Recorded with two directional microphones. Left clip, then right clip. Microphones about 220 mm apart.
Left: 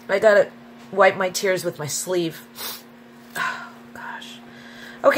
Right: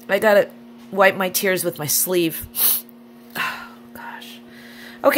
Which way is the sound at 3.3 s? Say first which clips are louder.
Right 1 dB; 40° right (ahead or behind).